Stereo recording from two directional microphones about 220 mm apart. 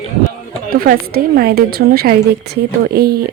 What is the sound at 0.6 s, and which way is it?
Speech, 40° right (ahead or behind).